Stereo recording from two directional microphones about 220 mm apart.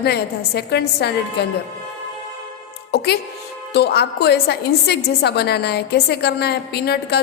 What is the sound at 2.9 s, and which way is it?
A woman's voice, 50° left (ahead or behind).